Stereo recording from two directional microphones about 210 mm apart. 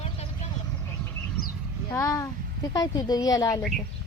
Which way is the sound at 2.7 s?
15° left (ahead or behind).